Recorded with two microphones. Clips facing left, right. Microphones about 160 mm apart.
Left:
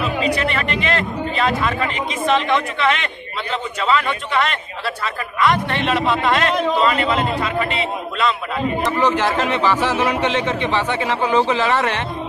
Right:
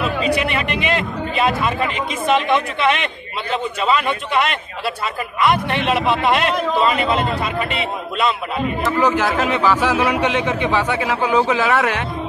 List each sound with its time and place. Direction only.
0.3 s a man's voice: 15° right (ahead or behind)
8.8 s a man's voice: 10° right (ahead or behind)